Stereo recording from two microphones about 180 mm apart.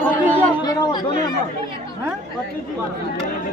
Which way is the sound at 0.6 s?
20° left (ahead or behind).